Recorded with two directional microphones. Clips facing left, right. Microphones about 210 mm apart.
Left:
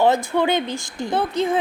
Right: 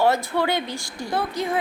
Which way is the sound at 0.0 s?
15° left (ahead or behind).